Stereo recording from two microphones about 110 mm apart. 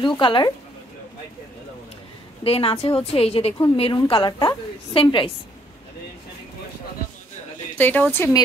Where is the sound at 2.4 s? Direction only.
60° left (ahead or behind).